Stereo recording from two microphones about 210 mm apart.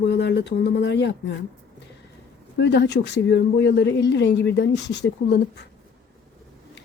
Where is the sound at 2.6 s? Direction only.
55° left (ahead or behind).